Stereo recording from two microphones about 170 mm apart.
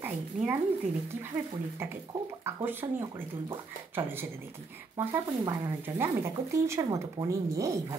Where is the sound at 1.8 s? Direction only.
15° right (ahead or behind).